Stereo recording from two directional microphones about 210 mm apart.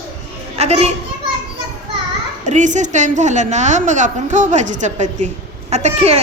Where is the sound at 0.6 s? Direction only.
30° right (ahead or behind).